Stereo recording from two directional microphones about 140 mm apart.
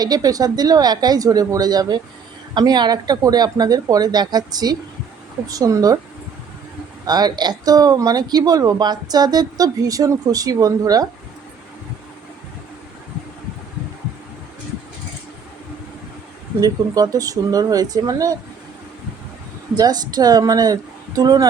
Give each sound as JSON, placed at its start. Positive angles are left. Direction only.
{"t": 0.0, "sound": "speech", "side_deg": -25}
{"t": 7.1, "sound": "speech", "side_deg": -30}
{"t": 16.6, "sound": "speech", "side_deg": -25}
{"t": 19.7, "sound": "speech", "side_deg": -30}